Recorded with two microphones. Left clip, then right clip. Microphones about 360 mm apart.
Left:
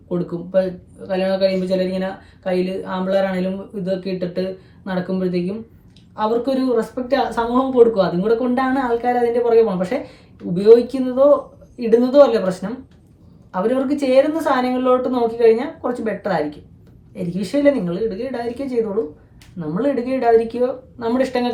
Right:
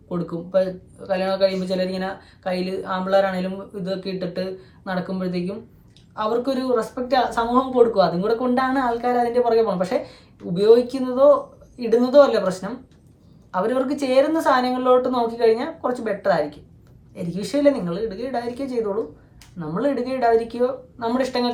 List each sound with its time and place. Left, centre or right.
0.1 s speech: centre